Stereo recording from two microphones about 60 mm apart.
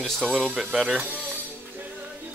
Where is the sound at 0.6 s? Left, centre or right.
Centre.